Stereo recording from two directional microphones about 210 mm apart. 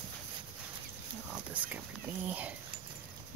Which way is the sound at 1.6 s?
5° right (ahead or behind).